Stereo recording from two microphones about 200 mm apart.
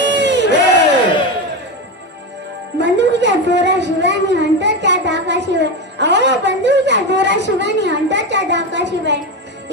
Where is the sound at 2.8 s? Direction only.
60° right (ahead or behind).